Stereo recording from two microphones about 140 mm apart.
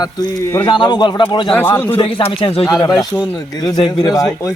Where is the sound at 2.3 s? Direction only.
45° left (ahead or behind).